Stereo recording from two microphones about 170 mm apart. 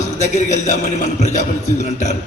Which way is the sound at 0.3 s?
45° left (ahead or behind).